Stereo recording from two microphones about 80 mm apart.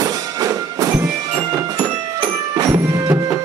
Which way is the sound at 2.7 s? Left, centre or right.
Right.